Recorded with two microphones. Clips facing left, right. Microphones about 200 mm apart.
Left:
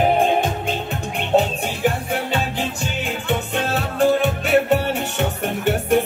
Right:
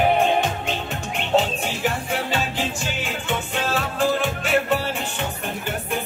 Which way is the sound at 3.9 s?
60° left (ahead or behind).